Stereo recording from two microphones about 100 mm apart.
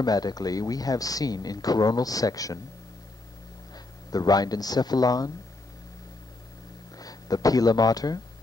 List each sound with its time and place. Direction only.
0.0 s speech: 40° left (ahead or behind)
3.7 s speech: 40° left (ahead or behind)
7.0 s speech: 40° left (ahead or behind)